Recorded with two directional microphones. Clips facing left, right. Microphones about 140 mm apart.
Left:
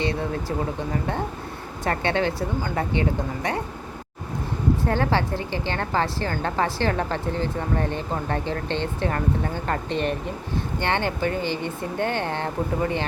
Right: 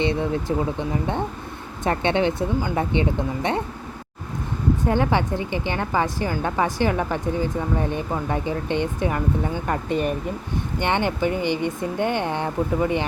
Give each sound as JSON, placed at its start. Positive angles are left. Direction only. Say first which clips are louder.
{"t": 0.0, "sound": "speech", "louder": "right 3 dB", "side_deg": -20}
{"t": 4.9, "sound": "speech", "louder": "right 4 dB", "side_deg": -15}